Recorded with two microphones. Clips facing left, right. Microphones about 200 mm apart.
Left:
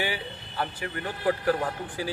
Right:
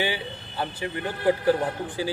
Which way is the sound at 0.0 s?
25° right (ahead or behind).